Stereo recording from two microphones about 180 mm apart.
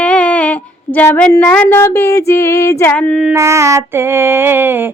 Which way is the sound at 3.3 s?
15° right (ahead or behind).